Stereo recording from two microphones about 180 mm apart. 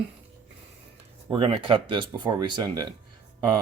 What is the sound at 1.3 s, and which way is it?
Speech, 30° right (ahead or behind).